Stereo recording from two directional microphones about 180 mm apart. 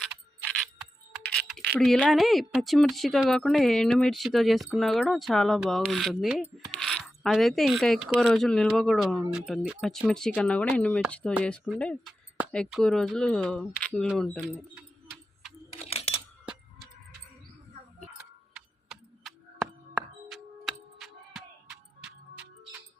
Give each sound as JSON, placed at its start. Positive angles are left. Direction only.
{"t": 1.2, "sound": "computer keyboard", "side_deg": 5}
{"t": 1.8, "sound": "speech", "side_deg": 0}
{"t": 15.7, "sound": "a sound", "side_deg": 35}
{"t": 18.5, "sound": "tick-tock", "side_deg": 0}
{"t": 20.3, "sound": "music", "side_deg": 0}